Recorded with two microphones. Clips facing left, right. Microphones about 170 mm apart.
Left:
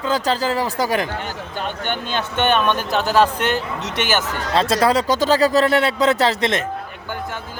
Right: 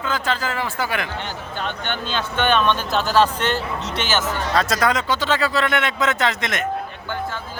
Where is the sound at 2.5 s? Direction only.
15° left (ahead or behind).